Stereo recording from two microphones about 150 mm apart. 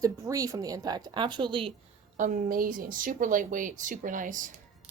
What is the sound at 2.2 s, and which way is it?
A woman's voice, 65° right (ahead or behind).